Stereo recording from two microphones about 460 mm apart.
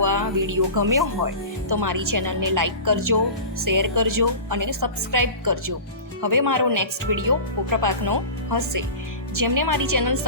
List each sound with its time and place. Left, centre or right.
0.0 s speech: right